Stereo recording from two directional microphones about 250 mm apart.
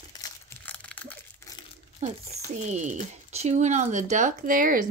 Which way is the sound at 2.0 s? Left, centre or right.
Right.